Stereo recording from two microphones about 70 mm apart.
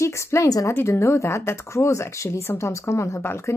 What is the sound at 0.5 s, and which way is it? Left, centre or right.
Speech, left.